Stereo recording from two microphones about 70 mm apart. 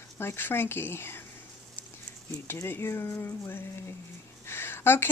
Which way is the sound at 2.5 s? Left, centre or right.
Left.